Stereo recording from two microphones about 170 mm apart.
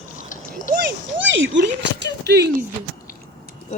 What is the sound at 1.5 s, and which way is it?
Speech, 90° right.